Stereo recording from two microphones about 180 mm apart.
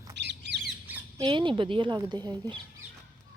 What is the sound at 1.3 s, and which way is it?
Speech, 25° right (ahead or behind).